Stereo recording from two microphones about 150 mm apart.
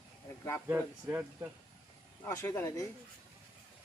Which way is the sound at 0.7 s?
15° right (ahead or behind).